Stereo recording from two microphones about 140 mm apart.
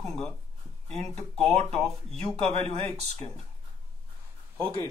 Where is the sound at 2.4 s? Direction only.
45° right (ahead or behind).